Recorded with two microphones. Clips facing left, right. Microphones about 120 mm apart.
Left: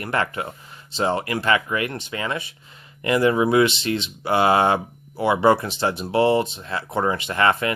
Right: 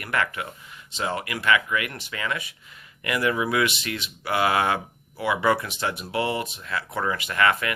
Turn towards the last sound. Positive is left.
turn(degrees=30)  # may be behind; listen again after turning